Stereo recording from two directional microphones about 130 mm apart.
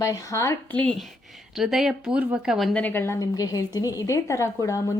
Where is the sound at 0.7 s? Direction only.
5° left (ahead or behind).